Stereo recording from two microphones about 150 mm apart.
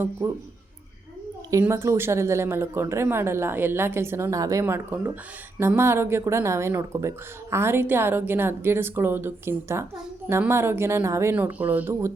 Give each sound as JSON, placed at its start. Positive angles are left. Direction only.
{"t": 0.2, "sound": "speech", "side_deg": -20}
{"t": 1.5, "sound": "speech", "side_deg": -20}